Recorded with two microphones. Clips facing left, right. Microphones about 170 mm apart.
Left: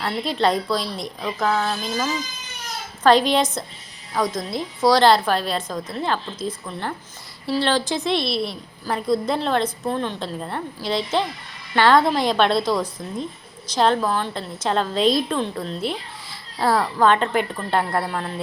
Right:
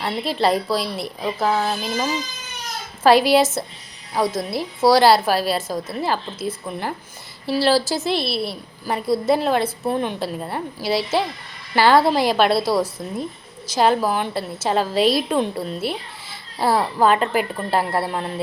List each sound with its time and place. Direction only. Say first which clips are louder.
0.0 s a woman's voice: right 1 dB; centre (ahead or behind)
1.5 s a woman's voice: right 1 dB; 20° right (ahead or behind)
3.0 s a woman's voice: right 2 dB; 5° right (ahead or behind)